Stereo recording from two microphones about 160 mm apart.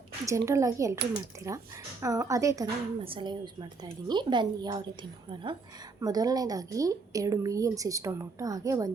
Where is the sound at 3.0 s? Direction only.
35° right (ahead or behind).